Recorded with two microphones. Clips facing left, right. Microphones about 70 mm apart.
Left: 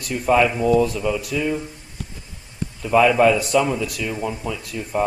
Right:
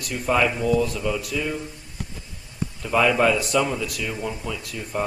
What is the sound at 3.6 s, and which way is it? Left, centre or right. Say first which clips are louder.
Speech: left 3 dB; left.